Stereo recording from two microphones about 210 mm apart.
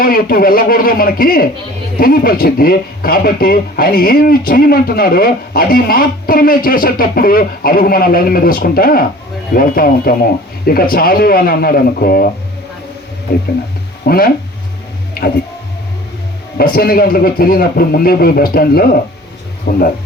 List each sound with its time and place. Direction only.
0.0 s speech: 45° left (ahead or behind)
14.0 s speech: 50° left (ahead or behind)
16.6 s speech: 45° left (ahead or behind)